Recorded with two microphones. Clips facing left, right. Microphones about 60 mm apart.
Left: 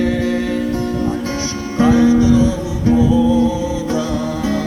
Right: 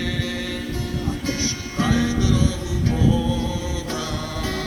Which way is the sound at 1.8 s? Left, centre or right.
Left.